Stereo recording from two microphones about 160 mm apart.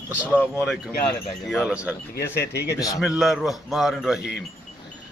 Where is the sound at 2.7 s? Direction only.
20° left (ahead or behind).